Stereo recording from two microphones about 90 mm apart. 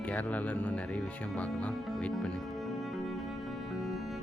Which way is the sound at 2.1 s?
5° left (ahead or behind).